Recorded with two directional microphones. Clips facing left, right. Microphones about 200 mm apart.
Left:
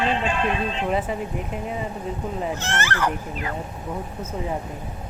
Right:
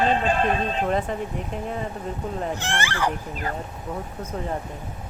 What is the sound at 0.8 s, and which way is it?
Speech, 5° left (ahead or behind).